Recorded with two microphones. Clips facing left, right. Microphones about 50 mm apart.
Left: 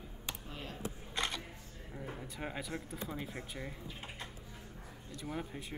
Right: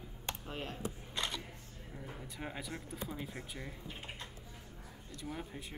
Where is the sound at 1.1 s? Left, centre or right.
Left.